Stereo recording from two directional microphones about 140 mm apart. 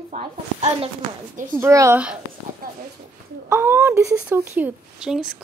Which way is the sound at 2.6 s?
90° right.